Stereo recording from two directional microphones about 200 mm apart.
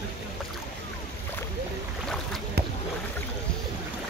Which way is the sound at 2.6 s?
55° right (ahead or behind).